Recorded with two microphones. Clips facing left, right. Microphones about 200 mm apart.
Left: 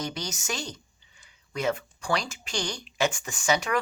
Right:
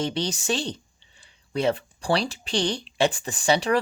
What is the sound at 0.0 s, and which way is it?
Speech, 30° right (ahead or behind).